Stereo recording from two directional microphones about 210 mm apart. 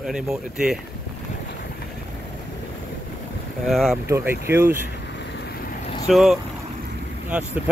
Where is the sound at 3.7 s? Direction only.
Centre (ahead or behind).